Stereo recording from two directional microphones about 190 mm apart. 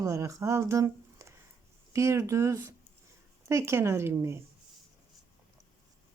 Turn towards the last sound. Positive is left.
turn(degrees=-15)  # may be behind; listen again after turning